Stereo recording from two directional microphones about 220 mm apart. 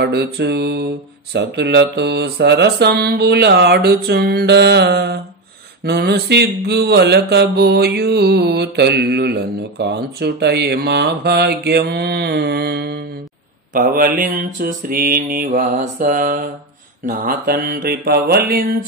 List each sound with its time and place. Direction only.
0.0 s mantra: 50° right (ahead or behind)